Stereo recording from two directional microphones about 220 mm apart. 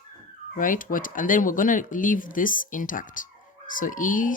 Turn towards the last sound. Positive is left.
turn(degrees=35)  # may be behind; listen again after turning